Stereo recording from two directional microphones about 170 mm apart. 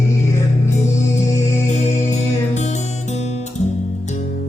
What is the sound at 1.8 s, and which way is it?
Music, 45° left (ahead or behind).